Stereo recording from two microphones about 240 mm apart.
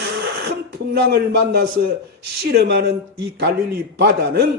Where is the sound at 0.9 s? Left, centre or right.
Right.